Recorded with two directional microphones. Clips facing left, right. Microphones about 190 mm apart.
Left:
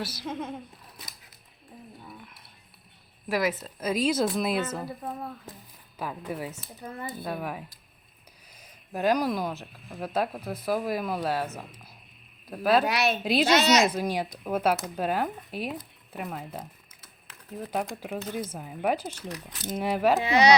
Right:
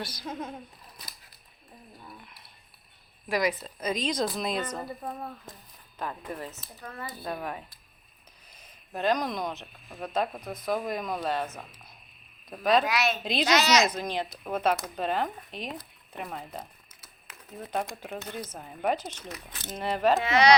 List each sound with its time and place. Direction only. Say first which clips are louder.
0.0 s a woman's voice: left 3 dB; 5° left (ahead or behind)
2.0 s a sound: left 2 dB; centre (ahead or behind)
3.2 s a woman's voice: left 1 dB; 5° left (ahead or behind)
6.8 s speech: left 3 dB; 20° left (ahead or behind)
7.3 s a woman's voice: even; 5° left (ahead or behind)
8.9 s a woman's voice: left 3 dB; 10° left (ahead or behind)
12.8 s a woman's voice: left 2 dB; 35° left (ahead or behind)
13.8 s speech: left 3 dB; 10° left (ahead or behind)
17.7 s speech: left 1 dB; 10° left (ahead or behind)